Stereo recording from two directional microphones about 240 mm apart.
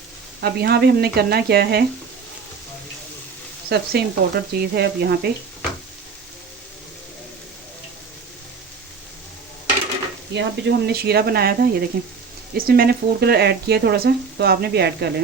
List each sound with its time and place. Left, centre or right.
0.4 s speech: right
3.7 s speech: right
10.3 s speech: right